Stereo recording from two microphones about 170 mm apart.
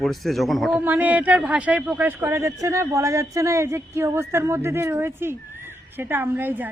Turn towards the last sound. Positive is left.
turn(degrees=-10)  # may be behind; listen again after turning